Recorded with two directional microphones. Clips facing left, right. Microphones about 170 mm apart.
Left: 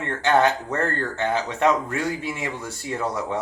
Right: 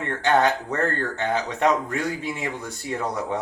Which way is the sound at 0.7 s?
15° left (ahead or behind).